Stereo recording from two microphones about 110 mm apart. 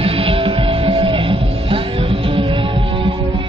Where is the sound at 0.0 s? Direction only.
55° right (ahead or behind).